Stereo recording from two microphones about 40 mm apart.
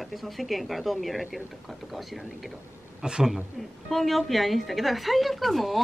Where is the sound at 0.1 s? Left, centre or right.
Centre.